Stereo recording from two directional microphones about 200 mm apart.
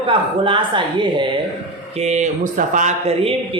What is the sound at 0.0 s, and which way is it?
Speech, 25° right (ahead or behind).